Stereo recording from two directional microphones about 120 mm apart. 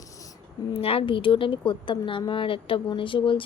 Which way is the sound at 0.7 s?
50° left (ahead or behind).